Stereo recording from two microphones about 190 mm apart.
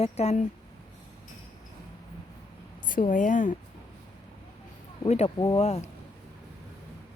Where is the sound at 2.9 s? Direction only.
45° left (ahead or behind).